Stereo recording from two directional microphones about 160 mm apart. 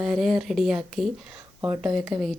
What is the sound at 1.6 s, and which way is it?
Speech, 10° right (ahead or behind).